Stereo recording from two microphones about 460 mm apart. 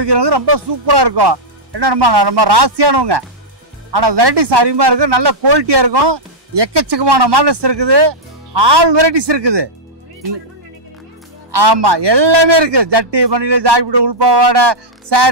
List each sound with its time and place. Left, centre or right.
0.0 s a man's voice: right
11.5 s a man's voice: right